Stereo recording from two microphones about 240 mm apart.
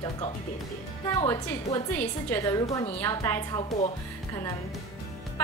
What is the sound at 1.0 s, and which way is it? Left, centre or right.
A woman's voice, centre.